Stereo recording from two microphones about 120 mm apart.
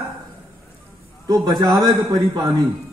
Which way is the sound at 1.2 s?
30° right (ahead or behind).